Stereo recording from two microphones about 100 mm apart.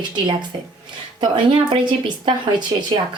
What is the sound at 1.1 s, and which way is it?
Speech, 55° right (ahead or behind).